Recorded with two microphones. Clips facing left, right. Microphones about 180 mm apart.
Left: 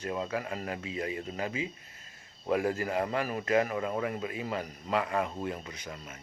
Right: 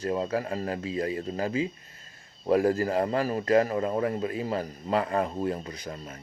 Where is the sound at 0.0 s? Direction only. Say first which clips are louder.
Right 5 dB; 35° right (ahead or behind).